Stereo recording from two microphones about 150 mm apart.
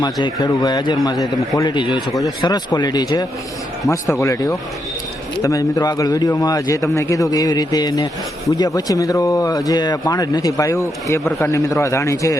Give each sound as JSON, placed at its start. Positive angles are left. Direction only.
{"t": 0.0, "sound": "speech", "side_deg": 30}